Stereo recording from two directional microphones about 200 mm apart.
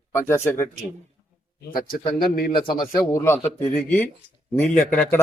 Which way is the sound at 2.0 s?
25° left (ahead or behind).